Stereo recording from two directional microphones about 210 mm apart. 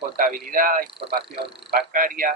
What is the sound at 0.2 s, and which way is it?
Speech, 40° right (ahead or behind).